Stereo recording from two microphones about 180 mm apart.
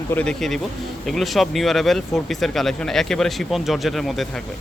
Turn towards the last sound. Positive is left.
turn(degrees=0)  # may be behind; listen again after turning